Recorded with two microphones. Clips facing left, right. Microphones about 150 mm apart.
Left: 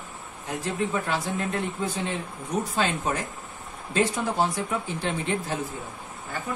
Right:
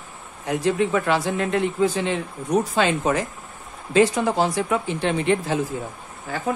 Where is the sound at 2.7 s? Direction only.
90° right; by 5.6 s 70° right (ahead or behind).